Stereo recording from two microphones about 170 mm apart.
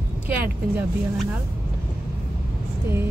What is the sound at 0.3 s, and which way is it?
Speech, 10° right (ahead or behind).